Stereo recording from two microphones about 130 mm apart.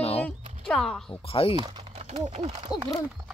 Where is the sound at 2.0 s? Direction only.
55° right (ahead or behind).